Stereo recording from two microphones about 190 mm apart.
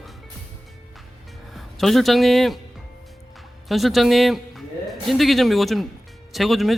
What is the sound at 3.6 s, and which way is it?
A man's voice, centre (ahead or behind).